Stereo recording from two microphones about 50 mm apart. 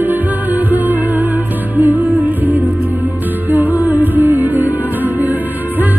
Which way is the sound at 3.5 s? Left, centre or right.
Right.